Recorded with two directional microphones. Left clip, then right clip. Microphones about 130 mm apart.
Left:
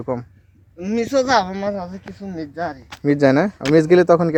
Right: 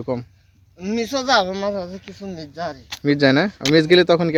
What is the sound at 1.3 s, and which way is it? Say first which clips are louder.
A woman's voice: even; 20° right (ahead or behind).